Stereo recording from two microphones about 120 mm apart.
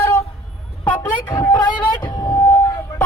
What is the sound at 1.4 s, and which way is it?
Speech, 35° left (ahead or behind).